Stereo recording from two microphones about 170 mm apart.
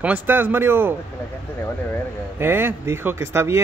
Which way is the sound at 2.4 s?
15° right (ahead or behind).